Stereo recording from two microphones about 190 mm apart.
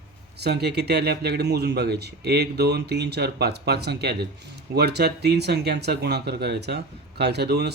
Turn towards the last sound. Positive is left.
turn(degrees=-60)  # may be behind; listen again after turning